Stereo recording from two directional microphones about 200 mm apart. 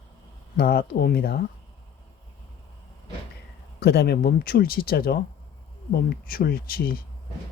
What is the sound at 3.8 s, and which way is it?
Speech, 55° left (ahead or behind).